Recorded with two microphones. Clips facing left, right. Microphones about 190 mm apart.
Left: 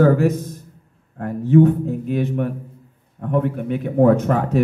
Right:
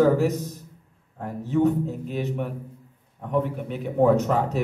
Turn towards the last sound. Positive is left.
turn(degrees=55)  # may be behind; listen again after turning